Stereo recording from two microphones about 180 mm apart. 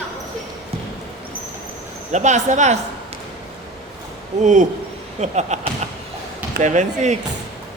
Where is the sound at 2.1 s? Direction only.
40° right (ahead or behind).